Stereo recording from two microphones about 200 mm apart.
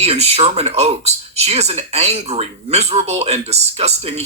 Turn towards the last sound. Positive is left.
turn(degrees=-30)  # may be behind; listen again after turning